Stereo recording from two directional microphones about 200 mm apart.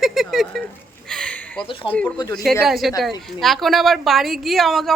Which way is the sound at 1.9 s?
5° left (ahead or behind).